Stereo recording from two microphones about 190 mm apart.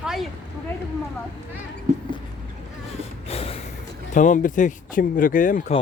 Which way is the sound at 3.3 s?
30° left (ahead or behind).